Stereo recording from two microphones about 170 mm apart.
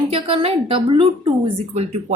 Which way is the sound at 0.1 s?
35° right (ahead or behind).